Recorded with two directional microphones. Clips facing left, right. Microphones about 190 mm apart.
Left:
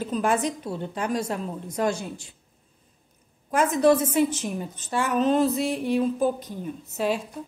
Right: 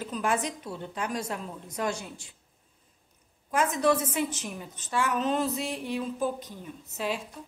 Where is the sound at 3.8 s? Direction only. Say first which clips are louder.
Left 9 dB; 35° left (ahead or behind).